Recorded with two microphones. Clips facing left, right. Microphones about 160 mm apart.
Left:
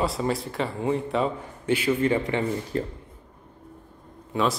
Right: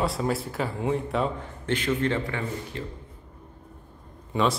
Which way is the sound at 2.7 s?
40° left (ahead or behind).